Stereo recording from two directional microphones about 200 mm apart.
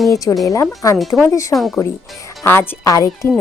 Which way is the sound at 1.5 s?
Centre (ahead or behind).